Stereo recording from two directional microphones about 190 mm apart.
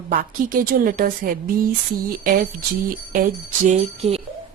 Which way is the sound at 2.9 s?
45° right (ahead or behind).